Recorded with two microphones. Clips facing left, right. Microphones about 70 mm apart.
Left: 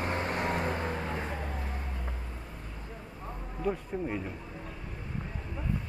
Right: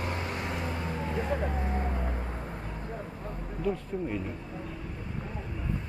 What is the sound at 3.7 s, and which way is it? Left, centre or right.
Speech, centre.